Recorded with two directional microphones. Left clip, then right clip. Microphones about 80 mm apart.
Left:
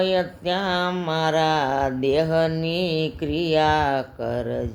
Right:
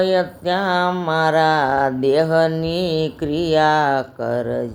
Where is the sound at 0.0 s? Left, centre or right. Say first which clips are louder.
Right 4 dB; right.